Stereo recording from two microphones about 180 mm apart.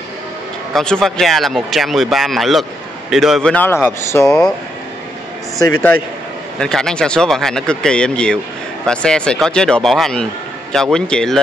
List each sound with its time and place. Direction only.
0.7 s a man's voice: 5° left (ahead or behind)
5.6 s a man's voice: 15° left (ahead or behind)
6.6 s speech: 5° left (ahead or behind)